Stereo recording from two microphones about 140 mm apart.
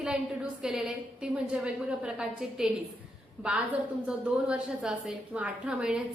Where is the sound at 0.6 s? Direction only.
5° right (ahead or behind).